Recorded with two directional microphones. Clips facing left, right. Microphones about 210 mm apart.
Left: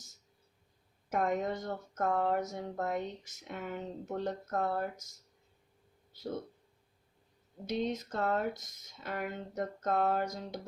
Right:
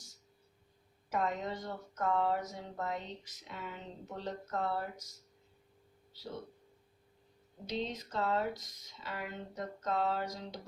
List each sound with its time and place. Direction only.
1.1 s speech: 50° left (ahead or behind)
7.7 s speech: 50° left (ahead or behind)